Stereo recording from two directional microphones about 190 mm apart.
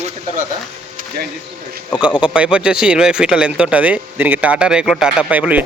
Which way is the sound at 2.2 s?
5° right (ahead or behind).